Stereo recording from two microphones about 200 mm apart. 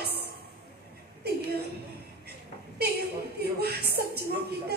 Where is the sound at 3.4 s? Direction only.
55° right (ahead or behind).